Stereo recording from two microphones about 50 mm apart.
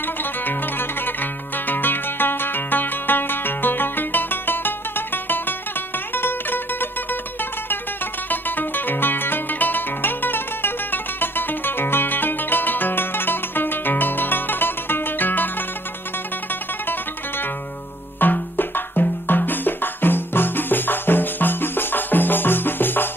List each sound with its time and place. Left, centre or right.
0.0 s music: left
8.3 s music: left
16.8 s music: left